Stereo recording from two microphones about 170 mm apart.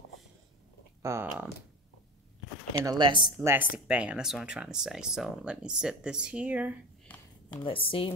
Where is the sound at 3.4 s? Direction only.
15° right (ahead or behind).